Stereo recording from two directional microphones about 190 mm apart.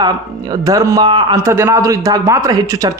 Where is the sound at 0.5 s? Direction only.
20° right (ahead or behind).